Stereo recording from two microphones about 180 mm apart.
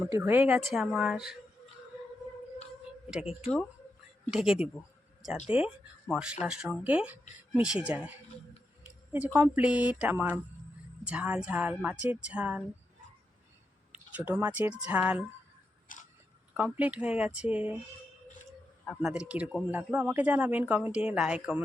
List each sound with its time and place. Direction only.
0.0 s speech: 10° right (ahead or behind)
3.1 s speech: 5° right (ahead or behind)
9.1 s speech: 10° right (ahead or behind)
14.3 s speech: 10° right (ahead or behind)
15.9 s a sound: 45° left (ahead or behind)
16.6 s speech: 10° right (ahead or behind)
18.9 s speech: 5° right (ahead or behind)